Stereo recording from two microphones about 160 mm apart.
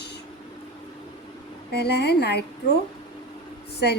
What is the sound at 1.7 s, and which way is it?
Speech, 90° left.